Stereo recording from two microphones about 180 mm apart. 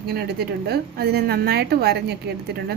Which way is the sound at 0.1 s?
60° right (ahead or behind).